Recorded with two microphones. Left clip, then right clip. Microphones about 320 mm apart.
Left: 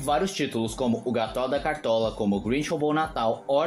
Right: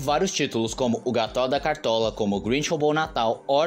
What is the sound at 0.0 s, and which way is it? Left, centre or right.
Speech, left.